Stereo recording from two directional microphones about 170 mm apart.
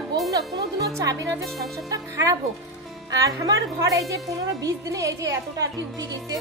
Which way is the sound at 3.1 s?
20° right (ahead or behind).